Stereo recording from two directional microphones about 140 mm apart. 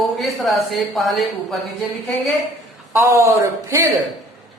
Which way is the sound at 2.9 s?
20° right (ahead or behind).